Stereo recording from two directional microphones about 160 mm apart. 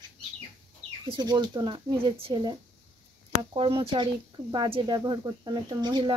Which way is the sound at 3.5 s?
35° right (ahead or behind).